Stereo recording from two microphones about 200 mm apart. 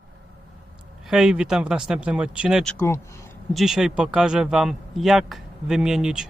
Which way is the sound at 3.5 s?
Centre (ahead or behind).